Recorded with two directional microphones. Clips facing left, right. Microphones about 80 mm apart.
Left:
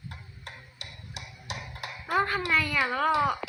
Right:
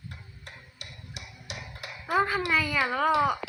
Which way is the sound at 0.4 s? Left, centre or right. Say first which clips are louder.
Left 2 dB; left.